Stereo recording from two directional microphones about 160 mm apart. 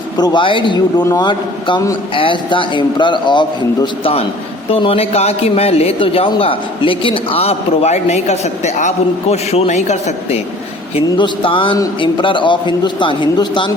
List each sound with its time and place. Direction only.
0.2 s a man's voice: 30° left (ahead or behind)
10.9 s a man's voice: 30° left (ahead or behind)